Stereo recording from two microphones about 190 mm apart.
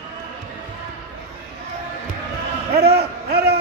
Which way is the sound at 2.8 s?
55° right (ahead or behind).